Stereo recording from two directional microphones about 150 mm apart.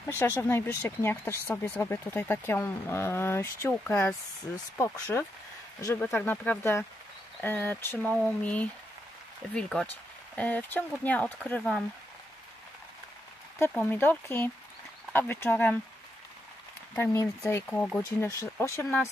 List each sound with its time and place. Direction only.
0.2 s speech: 15° left (ahead or behind)
13.6 s speech: 15° left (ahead or behind)
16.9 s speech: 15° left (ahead or behind)